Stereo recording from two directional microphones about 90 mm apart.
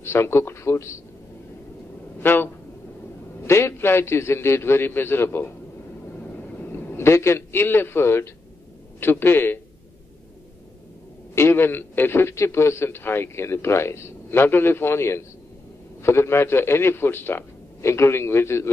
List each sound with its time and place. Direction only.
0.0 s a man's voice: 30° left (ahead or behind)
2.1 s a sound: 25° left (ahead or behind)
3.4 s a man's voice: 30° left (ahead or behind)
6.7 s a man's voice: 25° left (ahead or behind)
11.3 s a man's voice: 25° left (ahead or behind)